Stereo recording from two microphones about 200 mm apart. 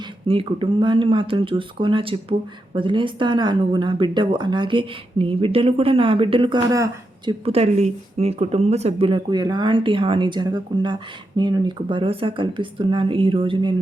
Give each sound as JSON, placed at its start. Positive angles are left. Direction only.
{"t": 0.3, "sound": "speech", "side_deg": -25}
{"t": 7.3, "sound": "speech", "side_deg": -30}